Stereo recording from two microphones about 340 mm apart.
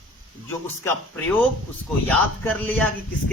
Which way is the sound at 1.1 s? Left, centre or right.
Centre.